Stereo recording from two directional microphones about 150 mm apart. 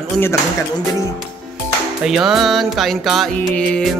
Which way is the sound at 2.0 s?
Centre (ahead or behind).